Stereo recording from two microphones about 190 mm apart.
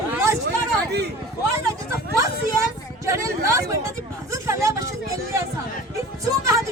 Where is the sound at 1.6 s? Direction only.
15° right (ahead or behind).